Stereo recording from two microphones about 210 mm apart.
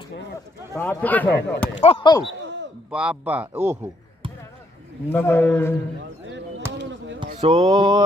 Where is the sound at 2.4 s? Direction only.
60° right (ahead or behind).